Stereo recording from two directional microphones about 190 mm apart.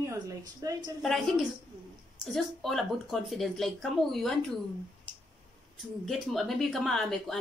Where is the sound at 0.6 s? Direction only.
20° right (ahead or behind).